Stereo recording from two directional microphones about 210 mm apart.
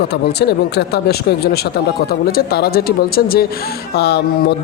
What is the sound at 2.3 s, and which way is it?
Speech, 45° left (ahead or behind).